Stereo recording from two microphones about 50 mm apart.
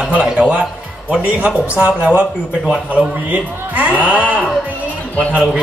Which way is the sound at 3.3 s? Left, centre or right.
Right.